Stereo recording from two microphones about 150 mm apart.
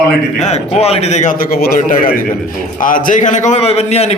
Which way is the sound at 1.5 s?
85° left.